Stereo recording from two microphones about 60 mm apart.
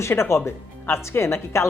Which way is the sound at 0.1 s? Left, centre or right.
Left.